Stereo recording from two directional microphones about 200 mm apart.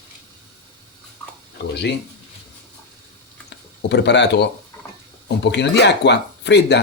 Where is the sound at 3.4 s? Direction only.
60° left (ahead or behind).